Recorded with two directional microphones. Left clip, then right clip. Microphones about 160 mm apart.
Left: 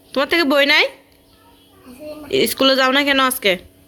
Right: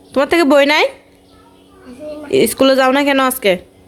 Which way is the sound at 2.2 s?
10° right (ahead or behind).